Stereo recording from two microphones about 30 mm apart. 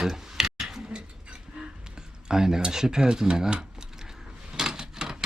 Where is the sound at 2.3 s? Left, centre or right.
Centre.